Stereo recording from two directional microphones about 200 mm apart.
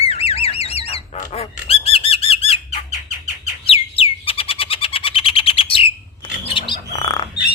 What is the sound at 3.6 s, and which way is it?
Bird, 30° left (ahead or behind).